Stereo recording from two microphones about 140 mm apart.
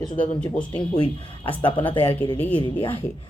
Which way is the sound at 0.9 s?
40° left (ahead or behind).